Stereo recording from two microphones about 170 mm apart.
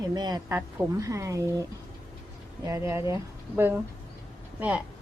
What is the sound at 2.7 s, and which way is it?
Speech, 15° right (ahead or behind).